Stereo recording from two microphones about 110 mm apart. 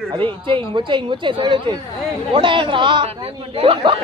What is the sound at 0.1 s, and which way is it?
Speech, 50° right (ahead or behind).